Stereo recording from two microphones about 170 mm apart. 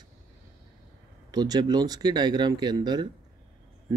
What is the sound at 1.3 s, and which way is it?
Speech, 25° right (ahead or behind).